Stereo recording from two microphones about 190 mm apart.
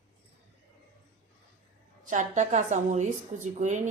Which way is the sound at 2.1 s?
40° right (ahead or behind).